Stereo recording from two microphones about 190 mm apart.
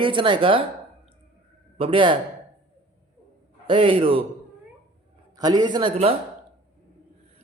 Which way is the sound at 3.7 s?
25° right (ahead or behind).